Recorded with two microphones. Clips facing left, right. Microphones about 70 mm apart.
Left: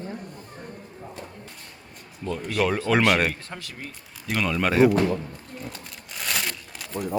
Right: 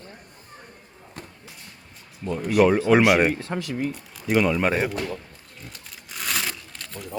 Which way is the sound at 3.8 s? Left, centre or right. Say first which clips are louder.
Right 11 dB; centre.